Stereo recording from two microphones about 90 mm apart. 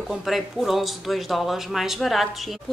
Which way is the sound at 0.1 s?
Centre (ahead or behind).